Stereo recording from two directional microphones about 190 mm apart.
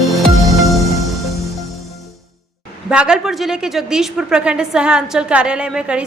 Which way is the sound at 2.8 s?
5° right (ahead or behind).